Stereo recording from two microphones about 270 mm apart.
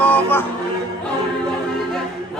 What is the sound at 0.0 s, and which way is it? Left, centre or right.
Music, centre.